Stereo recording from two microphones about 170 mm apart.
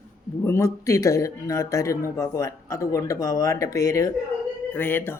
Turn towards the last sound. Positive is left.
turn(degrees=10)  # may be behind; listen again after turning